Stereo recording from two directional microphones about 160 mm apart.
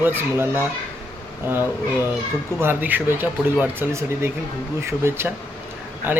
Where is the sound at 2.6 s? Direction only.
10° right (ahead or behind).